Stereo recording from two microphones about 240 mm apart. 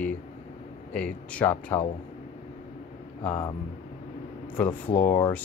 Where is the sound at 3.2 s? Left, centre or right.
Centre.